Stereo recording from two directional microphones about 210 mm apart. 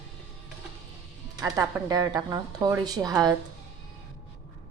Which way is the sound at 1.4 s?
15° right (ahead or behind).